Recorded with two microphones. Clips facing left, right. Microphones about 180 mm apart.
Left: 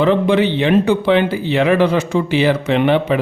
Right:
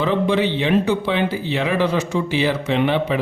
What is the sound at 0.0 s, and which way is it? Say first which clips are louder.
A man's voice: left 5 dB; 60° left (ahead or behind).